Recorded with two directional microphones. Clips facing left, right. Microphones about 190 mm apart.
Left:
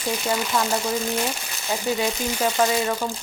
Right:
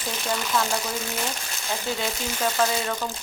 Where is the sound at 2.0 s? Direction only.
10° left (ahead or behind).